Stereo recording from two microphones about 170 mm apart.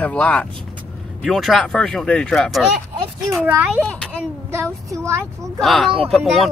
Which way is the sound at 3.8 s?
5° left (ahead or behind).